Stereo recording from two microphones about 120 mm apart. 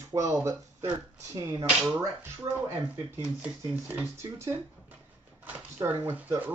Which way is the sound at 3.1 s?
10° right (ahead or behind).